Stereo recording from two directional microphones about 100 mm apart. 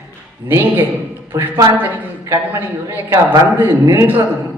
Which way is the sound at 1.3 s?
30° right (ahead or behind).